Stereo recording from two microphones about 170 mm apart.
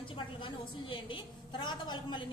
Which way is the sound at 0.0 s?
30° left (ahead or behind).